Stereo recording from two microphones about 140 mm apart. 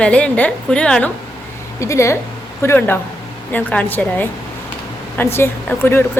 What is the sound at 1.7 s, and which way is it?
A woman's voice, 20° left (ahead or behind).